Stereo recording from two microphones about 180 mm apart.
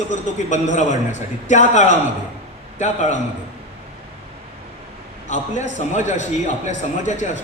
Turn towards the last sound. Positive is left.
turn(degrees=40)  # may be behind; listen again after turning